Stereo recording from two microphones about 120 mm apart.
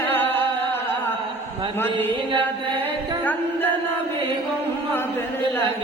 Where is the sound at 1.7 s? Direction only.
15° left (ahead or behind).